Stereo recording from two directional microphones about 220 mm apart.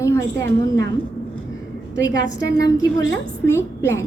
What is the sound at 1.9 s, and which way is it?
Speech, 15° left (ahead or behind).